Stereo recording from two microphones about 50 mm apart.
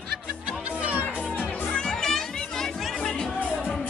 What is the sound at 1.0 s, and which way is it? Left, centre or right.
Music, left.